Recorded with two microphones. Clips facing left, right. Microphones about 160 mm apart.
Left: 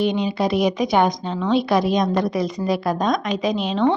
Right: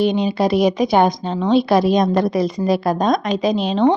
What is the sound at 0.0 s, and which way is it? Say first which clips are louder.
A woman's voice: right 3 dB; 35° right (ahead or behind).